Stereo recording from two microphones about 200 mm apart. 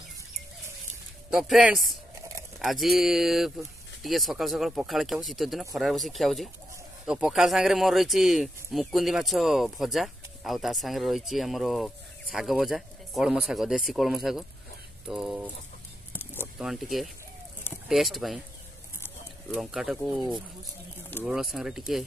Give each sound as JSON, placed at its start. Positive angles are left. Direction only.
{"t": 1.3, "sound": "speech", "side_deg": 0}